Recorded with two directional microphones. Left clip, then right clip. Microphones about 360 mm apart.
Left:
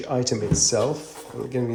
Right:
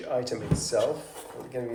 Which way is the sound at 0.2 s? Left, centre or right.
Centre.